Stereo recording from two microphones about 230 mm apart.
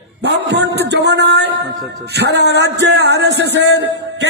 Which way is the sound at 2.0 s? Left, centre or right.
Right.